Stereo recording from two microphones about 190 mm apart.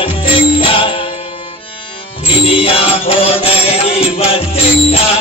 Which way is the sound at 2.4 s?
30° left (ahead or behind).